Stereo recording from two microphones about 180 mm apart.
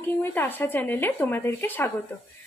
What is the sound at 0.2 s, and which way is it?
A woman's voice, 10° left (ahead or behind).